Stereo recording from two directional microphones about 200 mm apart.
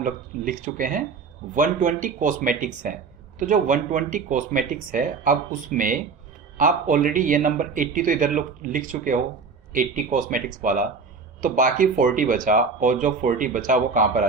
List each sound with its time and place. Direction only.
0.0 s speech: 40° right (ahead or behind)